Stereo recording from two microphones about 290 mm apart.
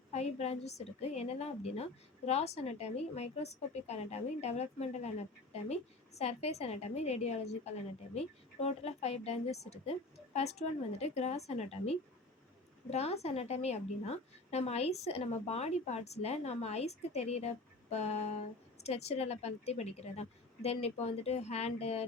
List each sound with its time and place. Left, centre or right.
0.1 s a woman's voice: left